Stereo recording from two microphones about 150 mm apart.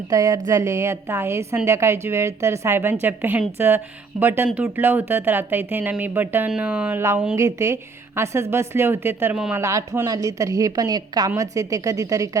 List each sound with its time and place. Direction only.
0.1 s a woman's voice: 20° right (ahead or behind)